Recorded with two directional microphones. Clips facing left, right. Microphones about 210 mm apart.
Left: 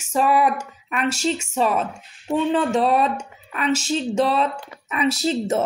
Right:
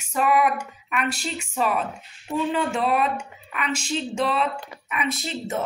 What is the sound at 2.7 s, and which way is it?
Speech, 35° left (ahead or behind).